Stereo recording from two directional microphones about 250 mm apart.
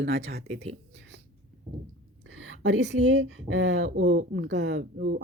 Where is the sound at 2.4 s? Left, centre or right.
Right.